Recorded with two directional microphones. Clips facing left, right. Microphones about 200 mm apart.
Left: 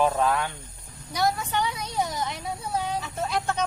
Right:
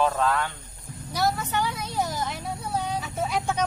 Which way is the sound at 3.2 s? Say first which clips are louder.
Right 1 dB; 10° right (ahead or behind).